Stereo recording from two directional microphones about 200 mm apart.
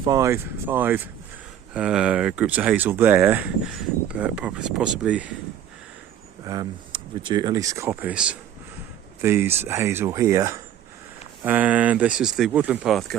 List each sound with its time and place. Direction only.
0.0 s speech: 15° right (ahead or behind)
6.4 s speech: 20° right (ahead or behind); by 13.1 s centre (ahead or behind)